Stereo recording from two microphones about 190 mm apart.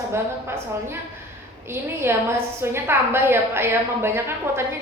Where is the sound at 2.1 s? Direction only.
10° right (ahead or behind).